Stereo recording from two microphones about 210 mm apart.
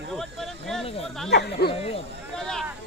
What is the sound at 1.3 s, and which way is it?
Speech, 55° left (ahead or behind).